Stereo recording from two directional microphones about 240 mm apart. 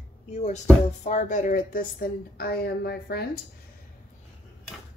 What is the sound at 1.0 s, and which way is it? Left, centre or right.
A woman's voice, left.